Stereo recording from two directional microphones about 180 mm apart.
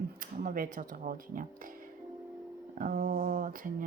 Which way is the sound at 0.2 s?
50° right (ahead or behind).